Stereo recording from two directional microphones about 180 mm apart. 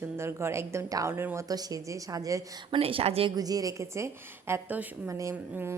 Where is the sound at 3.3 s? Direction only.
20° right (ahead or behind).